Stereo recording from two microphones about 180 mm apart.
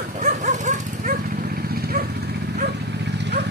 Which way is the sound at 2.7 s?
70° right (ahead or behind).